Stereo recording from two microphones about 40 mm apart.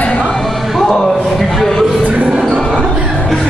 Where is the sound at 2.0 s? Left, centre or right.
Right.